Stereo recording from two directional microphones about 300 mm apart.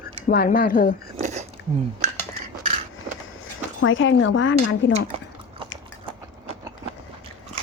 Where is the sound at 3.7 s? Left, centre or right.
Left.